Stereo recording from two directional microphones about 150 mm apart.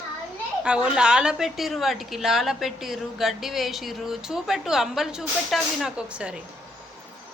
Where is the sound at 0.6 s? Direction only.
5° right (ahead or behind).